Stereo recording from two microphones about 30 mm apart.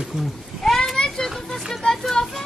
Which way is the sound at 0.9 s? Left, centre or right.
Left.